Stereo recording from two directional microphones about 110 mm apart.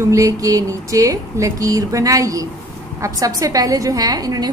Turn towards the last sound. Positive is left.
turn(degrees=-35)  # may be behind; listen again after turning